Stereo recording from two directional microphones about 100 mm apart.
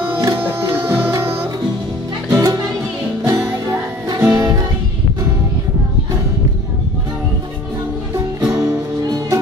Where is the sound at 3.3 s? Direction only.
30° right (ahead or behind).